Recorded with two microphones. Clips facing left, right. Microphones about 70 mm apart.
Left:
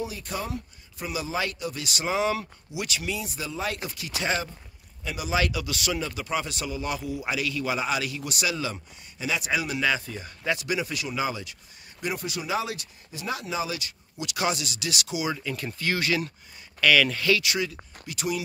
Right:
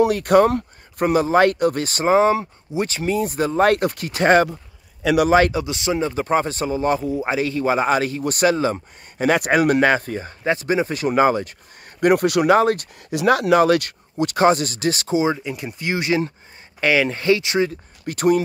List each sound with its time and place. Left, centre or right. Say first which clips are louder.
0.0 s speech: right 18 dB; right
5.0 s a man's voice: right 17 dB; right
5.3 s speech: right 8 dB; right
5.6 s speech: right 8 dB; right
9.2 s speech: right 11 dB; right
12.0 s speech: right 16 dB; right
13.1 s speech: right 16 dB; right
18.0 s speech: right 13 dB; right